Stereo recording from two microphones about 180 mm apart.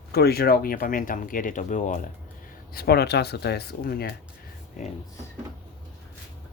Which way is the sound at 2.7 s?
60° left (ahead or behind).